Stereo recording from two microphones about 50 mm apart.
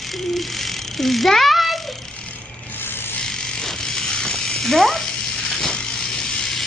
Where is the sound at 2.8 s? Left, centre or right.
Left.